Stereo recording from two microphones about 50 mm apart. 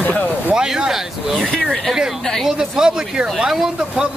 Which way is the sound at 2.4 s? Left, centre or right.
Centre.